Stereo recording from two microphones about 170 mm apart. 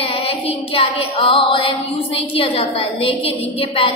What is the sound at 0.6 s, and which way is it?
Female singing, 35° left (ahead or behind).